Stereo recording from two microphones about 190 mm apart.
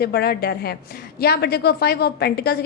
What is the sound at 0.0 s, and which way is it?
A woman's voice, 55° left (ahead or behind).